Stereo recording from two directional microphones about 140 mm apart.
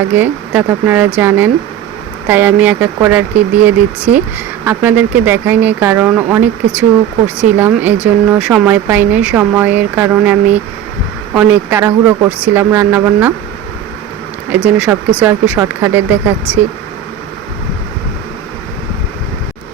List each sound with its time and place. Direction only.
0.1 s speech: 10° right (ahead or behind)
14.5 s speech: 10° right (ahead or behind)